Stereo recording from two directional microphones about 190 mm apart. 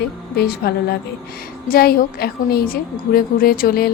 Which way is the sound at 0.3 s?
55° left (ahead or behind).